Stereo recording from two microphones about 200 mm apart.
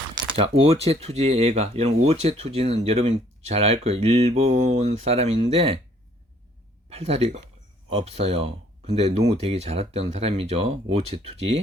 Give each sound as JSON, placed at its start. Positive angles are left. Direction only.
{"t": 0.1, "sound": "speech", "side_deg": -25}
{"t": 6.9, "sound": "speech", "side_deg": -30}